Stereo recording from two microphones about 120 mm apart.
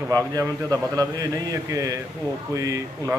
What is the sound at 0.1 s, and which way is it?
A man's voice, 30° right (ahead or behind).